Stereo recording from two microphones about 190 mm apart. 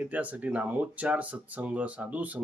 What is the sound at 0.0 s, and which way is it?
Speech, 10° right (ahead or behind).